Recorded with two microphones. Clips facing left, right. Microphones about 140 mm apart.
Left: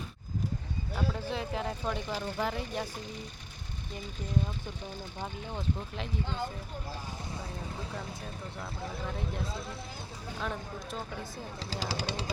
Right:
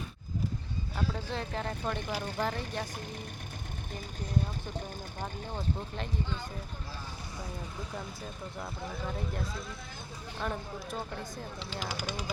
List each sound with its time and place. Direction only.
1.1 s speech: 5° left (ahead or behind)
9.0 s speech: centre (ahead or behind)
10.4 s speech: 5° right (ahead or behind)
11.6 s speech: 35° left (ahead or behind)